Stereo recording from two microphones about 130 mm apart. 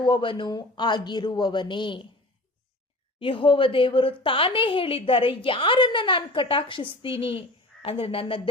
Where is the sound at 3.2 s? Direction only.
40° left (ahead or behind).